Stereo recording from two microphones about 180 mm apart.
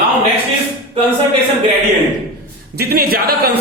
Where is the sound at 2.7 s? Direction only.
60° right (ahead or behind).